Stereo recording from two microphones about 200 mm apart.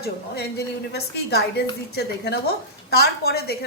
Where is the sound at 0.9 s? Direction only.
55° left (ahead or behind).